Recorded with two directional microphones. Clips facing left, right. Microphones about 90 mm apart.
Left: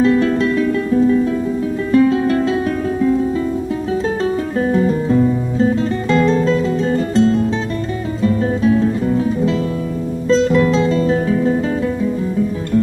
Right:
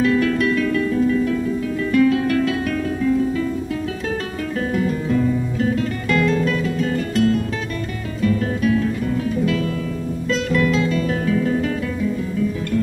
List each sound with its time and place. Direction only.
0.0 s music: 30° left (ahead or behind)
4.6 s music: 30° left (ahead or behind)